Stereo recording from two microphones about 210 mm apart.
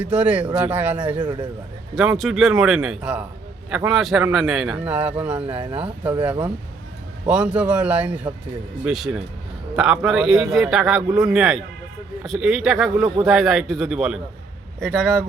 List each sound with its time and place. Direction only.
0.0 s a man's voice: 5° right (ahead or behind)
1.2 s a man's voice: 20° right (ahead or behind)
2.0 s a man's voice: centre (ahead or behind)